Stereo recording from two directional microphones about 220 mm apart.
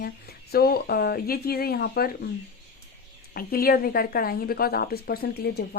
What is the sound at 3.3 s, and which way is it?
Speech, 45° left (ahead or behind).